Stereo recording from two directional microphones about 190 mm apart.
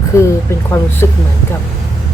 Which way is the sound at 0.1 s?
15° left (ahead or behind).